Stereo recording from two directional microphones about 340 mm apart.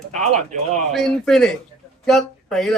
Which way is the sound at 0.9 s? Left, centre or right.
Centre.